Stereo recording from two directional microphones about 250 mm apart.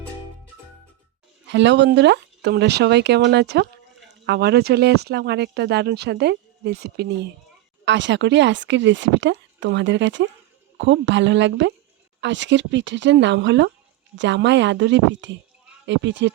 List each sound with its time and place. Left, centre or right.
1.5 s speech: right